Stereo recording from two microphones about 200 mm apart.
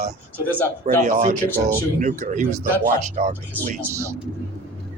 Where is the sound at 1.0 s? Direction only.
35° right (ahead or behind).